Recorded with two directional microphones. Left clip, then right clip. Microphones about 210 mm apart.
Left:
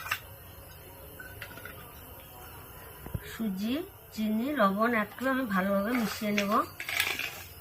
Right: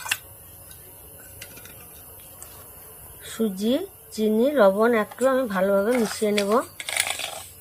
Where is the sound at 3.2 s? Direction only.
25° right (ahead or behind).